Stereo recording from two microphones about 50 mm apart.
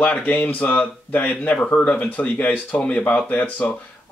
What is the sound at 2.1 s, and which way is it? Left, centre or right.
Speech, left.